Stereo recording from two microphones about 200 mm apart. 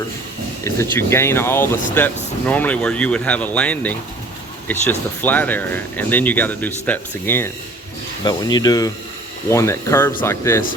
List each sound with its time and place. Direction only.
0.6 s speech: 15° left (ahead or behind)